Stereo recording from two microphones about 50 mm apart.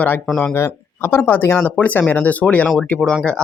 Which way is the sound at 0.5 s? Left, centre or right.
Left.